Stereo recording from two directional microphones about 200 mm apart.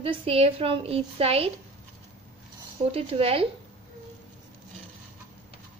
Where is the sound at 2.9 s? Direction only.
30° right (ahead or behind).